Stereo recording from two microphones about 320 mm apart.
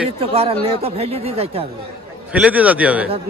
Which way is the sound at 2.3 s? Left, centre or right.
Centre.